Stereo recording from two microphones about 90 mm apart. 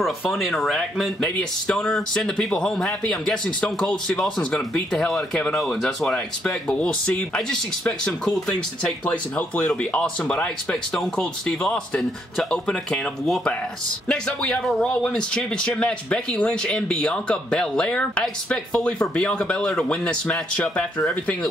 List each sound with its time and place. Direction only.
0.3 s speech: centre (ahead or behind)